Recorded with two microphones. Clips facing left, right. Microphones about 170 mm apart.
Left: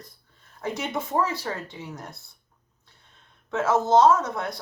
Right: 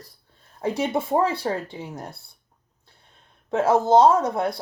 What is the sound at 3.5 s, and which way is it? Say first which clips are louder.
Speech: right 3 dB; 30° right (ahead or behind).